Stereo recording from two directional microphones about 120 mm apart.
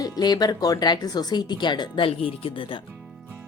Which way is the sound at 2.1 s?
50° left (ahead or behind).